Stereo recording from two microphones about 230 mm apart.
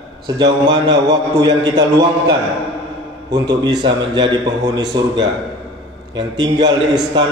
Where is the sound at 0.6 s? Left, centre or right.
Centre.